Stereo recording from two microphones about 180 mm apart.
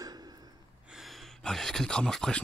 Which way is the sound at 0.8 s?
Centre (ahead or behind).